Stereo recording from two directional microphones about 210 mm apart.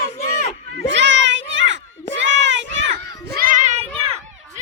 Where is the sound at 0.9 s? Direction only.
60° right (ahead or behind).